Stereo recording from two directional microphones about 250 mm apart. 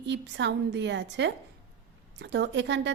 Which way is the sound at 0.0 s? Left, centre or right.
Right.